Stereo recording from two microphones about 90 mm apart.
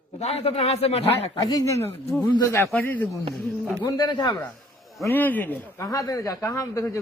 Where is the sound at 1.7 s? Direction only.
30° left (ahead or behind).